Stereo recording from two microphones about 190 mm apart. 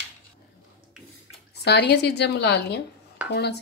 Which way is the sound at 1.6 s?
60° left (ahead or behind).